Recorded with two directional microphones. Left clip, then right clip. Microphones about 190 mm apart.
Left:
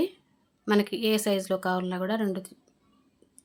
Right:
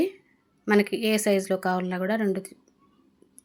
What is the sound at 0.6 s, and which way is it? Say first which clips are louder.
A woman's voice: right 3 dB; 10° right (ahead or behind).